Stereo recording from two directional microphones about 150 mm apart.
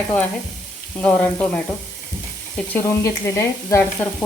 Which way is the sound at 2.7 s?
20° left (ahead or behind).